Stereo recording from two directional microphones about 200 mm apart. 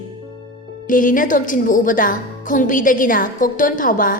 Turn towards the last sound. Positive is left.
turn(degrees=40)  # may be behind; listen again after turning